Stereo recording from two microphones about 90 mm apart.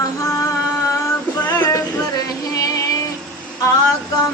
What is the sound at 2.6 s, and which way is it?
Vehicle, 40° left (ahead or behind).